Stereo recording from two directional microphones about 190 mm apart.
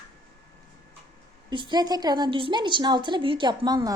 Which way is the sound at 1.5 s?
25° right (ahead or behind).